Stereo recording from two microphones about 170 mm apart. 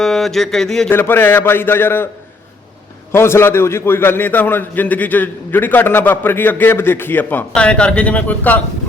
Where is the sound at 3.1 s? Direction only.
15° left (ahead or behind).